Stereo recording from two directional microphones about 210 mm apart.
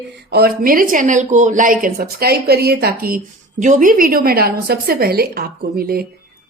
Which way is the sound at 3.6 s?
35° right (ahead or behind).